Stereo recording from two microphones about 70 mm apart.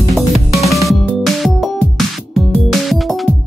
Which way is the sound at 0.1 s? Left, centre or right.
Centre.